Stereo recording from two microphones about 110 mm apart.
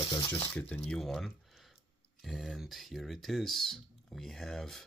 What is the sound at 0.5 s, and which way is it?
Speech, 10° left (ahead or behind).